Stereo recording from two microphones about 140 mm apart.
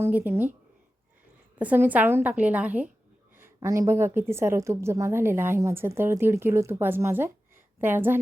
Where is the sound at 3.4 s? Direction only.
20° right (ahead or behind).